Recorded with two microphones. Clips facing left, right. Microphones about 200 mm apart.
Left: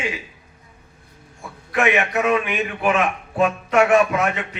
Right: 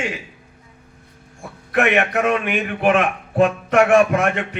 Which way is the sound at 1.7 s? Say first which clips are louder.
Right 2 dB; 50° right (ahead or behind).